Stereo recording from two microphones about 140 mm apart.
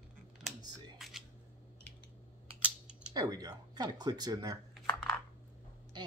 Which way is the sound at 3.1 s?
25° right (ahead or behind).